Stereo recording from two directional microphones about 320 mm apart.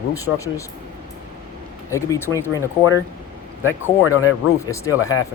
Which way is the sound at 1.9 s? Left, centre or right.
Centre.